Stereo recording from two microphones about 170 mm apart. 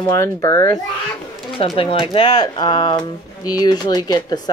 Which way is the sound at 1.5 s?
30° left (ahead or behind).